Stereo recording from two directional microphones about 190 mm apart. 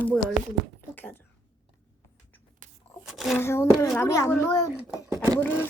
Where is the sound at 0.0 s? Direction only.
5° left (ahead or behind).